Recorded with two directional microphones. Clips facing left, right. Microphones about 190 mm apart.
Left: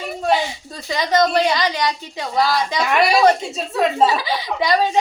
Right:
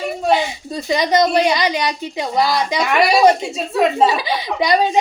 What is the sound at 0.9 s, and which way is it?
A woman's voice, 15° right (ahead or behind).